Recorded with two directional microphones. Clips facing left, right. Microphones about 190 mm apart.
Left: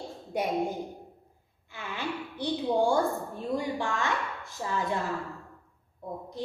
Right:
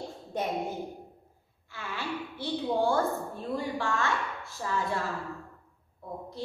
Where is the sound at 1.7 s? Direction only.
20° left (ahead or behind).